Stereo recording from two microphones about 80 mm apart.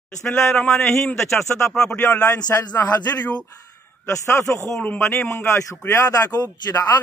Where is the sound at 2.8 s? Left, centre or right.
Centre.